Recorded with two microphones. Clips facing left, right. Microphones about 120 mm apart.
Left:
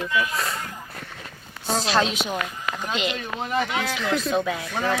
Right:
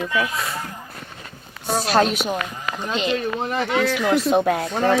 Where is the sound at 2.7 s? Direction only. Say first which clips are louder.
Right 5 dB; 30° right (ahead or behind).